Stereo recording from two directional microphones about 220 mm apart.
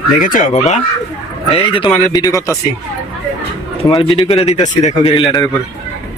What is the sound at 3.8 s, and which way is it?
A man's voice, 25° left (ahead or behind).